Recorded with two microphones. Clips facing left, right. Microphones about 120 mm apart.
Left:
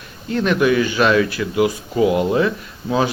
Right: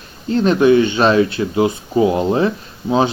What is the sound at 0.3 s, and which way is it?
Speech, 30° right (ahead or behind).